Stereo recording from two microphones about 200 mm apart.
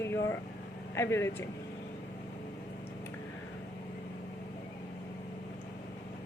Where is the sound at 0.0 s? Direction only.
15° left (ahead or behind).